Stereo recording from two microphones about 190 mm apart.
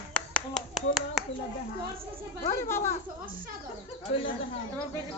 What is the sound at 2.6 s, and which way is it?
Speech, 15° left (ahead or behind).